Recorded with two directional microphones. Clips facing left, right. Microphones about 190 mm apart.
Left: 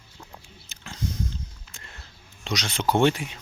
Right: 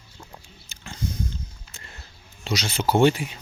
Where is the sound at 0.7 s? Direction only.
Centre (ahead or behind).